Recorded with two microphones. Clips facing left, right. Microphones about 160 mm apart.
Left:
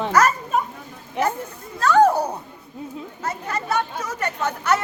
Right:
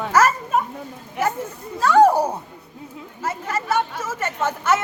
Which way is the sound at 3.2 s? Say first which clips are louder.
Right 2 dB; 5° right (ahead or behind).